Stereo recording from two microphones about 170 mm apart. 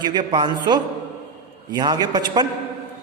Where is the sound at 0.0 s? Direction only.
25° right (ahead or behind).